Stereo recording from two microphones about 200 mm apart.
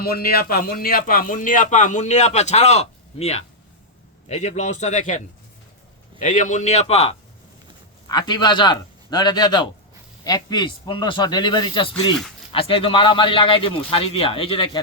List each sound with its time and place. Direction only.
0.0 s a man's voice: 50° left (ahead or behind); by 14.8 s 25° left (ahead or behind)